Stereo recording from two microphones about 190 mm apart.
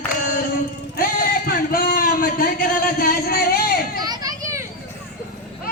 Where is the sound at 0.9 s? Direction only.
50° left (ahead or behind).